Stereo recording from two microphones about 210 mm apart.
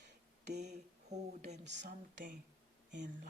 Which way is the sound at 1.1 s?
35° right (ahead or behind).